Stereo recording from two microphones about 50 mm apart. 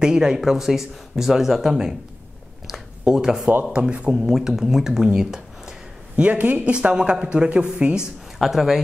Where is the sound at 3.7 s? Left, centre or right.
Right.